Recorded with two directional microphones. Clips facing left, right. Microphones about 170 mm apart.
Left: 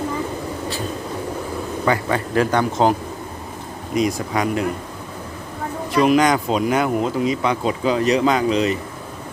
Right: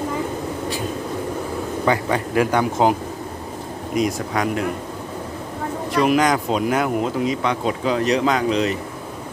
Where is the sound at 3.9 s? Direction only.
Centre (ahead or behind).